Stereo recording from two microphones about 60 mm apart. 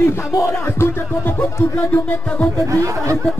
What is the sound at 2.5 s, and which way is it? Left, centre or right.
Speech, right.